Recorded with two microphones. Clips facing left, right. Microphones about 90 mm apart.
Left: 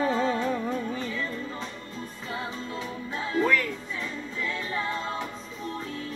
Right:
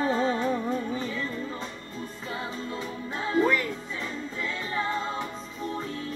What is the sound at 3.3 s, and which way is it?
Music, 15° right (ahead or behind).